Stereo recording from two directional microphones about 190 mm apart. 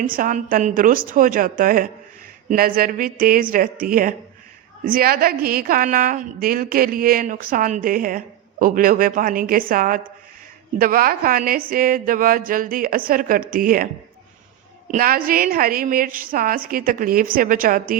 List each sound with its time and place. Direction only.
0.1 s a woman's voice: 45° right (ahead or behind)
14.8 s a woman's voice: 50° right (ahead or behind)